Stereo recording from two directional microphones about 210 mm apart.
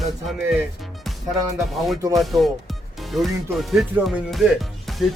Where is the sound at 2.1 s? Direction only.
Centre (ahead or behind).